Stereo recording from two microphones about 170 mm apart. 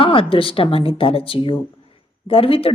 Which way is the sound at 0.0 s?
30° left (ahead or behind).